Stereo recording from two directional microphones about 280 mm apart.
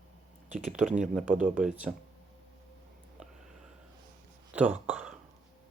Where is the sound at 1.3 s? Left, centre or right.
Right.